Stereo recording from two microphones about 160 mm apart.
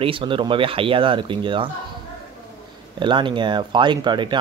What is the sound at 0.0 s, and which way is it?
Speech, 35° right (ahead or behind).